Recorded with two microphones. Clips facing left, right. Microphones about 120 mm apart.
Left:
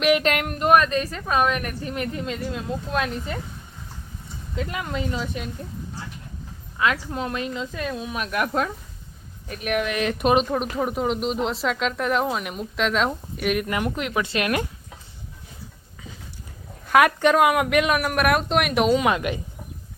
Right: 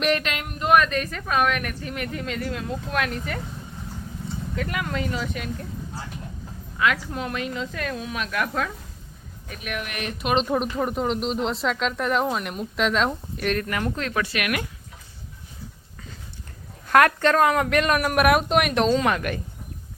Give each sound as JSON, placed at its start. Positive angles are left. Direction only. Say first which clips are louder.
{"t": 0.3, "sound": "a sound", "louder": "left 7 dB", "side_deg": 40}
{"t": 0.6, "sound": "a woman's voice", "louder": "left 1 dB", "side_deg": 35}
{"t": 4.5, "sound": "a woman's voice", "louder": "left 1 dB", "side_deg": 25}
{"t": 6.7, "sound": "a woman's voice", "louder": "even", "side_deg": 30}
{"t": 9.7, "sound": "speech", "louder": "left 8 dB", "side_deg": 60}
{"t": 10.5, "sound": "speech", "louder": "even", "side_deg": 0}
{"t": 13.7, "sound": "a woman's voice", "louder": "left 1 dB", "side_deg": 20}
{"t": 16.9, "sound": "speech", "louder": "left 1 dB", "side_deg": 10}